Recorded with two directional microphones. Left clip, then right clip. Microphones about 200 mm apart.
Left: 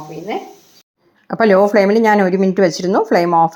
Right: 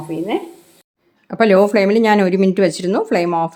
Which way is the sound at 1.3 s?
5° left (ahead or behind).